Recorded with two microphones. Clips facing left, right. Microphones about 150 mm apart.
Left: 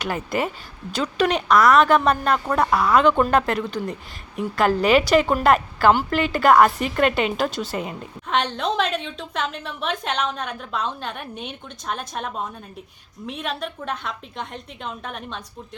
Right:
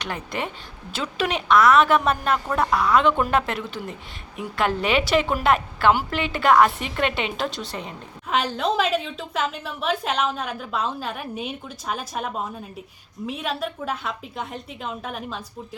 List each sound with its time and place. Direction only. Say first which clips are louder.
0.0 s a woman's voice: left 5 dB; 5° left (ahead or behind)